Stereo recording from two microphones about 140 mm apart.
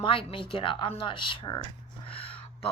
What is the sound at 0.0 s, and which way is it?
Speech, 40° left (ahead or behind).